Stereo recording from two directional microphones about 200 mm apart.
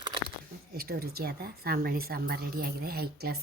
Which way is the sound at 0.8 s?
50° right (ahead or behind).